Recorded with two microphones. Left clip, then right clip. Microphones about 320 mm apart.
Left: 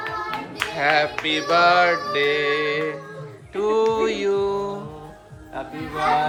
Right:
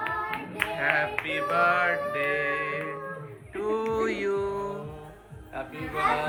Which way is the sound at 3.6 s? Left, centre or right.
Centre.